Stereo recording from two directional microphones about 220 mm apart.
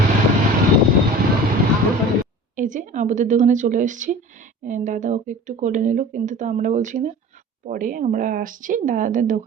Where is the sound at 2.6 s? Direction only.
35° right (ahead or behind).